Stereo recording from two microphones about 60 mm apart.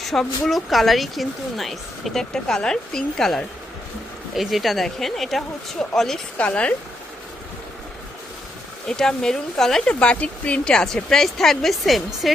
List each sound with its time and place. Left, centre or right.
0.0 s speech: centre
4.4 s speech: centre
6.3 s speech: centre
8.9 s speech: centre
9.9 s speech: centre